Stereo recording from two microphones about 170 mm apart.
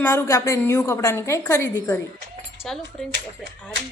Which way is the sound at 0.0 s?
15° left (ahead or behind).